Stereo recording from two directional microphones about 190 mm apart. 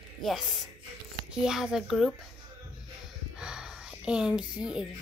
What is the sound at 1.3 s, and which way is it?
Speech, 5° right (ahead or behind).